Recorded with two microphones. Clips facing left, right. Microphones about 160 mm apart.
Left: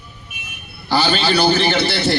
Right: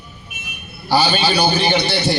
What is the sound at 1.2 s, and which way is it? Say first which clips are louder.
Speech: left 1 dB; 15° right (ahead or behind).